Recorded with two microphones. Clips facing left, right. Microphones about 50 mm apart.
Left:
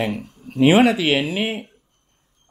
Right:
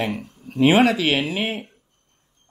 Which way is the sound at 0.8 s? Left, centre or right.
Centre.